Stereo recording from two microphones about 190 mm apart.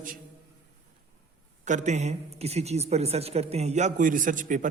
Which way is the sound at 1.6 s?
40° right (ahead or behind).